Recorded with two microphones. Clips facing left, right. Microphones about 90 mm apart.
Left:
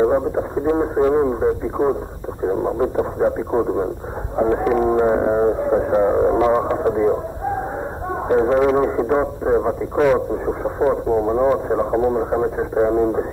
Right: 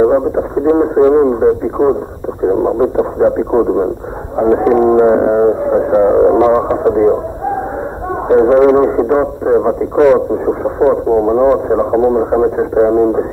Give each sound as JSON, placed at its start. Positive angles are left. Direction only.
{"t": 0.0, "sound": "speech", "side_deg": -25}
{"t": 8.3, "sound": "speech", "side_deg": -35}